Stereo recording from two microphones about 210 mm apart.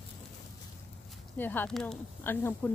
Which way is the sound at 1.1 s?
10° left (ahead or behind).